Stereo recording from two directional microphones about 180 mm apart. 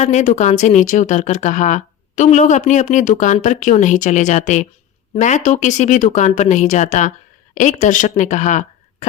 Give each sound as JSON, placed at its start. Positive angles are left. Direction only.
{"t": 0.0, "sound": "speech", "side_deg": 40}